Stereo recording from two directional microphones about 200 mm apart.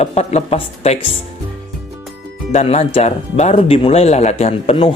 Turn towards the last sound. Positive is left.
turn(degrees=30)  # may be behind; listen again after turning